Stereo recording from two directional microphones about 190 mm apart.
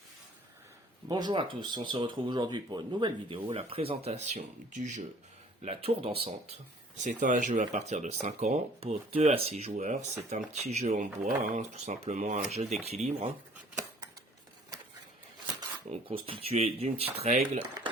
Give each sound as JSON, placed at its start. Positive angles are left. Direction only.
{"t": 1.0, "sound": "speech", "side_deg": -20}
{"t": 7.0, "sound": "speech", "side_deg": -45}
{"t": 15.9, "sound": "speech", "side_deg": -30}